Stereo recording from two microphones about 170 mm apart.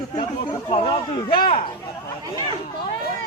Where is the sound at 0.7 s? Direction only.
30° left (ahead or behind).